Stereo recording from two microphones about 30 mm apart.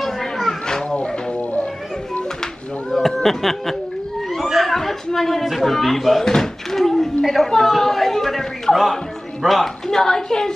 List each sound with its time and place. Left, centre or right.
0.5 s children playing: centre
2.9 s speech: centre
4.6 s a sound: centre
5.4 s a man's voice: centre
6.2 s door: centre
7.2 s a man's voice: centre
9.8 s a woman's voice: centre